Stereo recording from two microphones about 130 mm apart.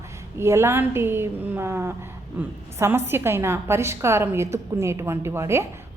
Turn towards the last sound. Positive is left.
turn(degrees=-20)  # may be behind; listen again after turning